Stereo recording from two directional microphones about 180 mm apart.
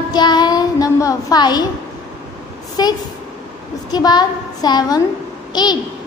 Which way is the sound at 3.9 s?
20° left (ahead or behind).